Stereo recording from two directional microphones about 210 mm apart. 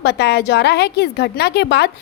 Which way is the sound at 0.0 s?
50° left (ahead or behind).